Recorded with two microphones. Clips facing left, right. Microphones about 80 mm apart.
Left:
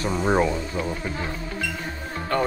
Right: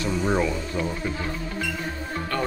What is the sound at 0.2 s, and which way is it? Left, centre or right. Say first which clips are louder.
Speech: left 3 dB; left.